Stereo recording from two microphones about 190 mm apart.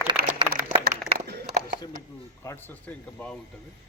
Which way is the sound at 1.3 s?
50° right (ahead or behind).